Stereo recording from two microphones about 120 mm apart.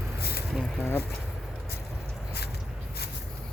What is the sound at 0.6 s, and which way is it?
Speech, 5° left (ahead or behind).